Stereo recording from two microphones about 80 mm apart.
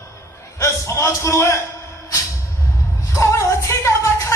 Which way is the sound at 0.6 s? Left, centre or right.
Left.